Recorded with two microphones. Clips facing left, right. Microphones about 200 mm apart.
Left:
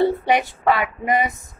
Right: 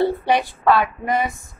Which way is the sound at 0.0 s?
20° left (ahead or behind).